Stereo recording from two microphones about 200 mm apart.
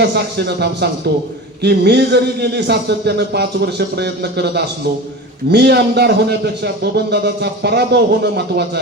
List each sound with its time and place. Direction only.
0.0 s a man's voice: 55° right (ahead or behind)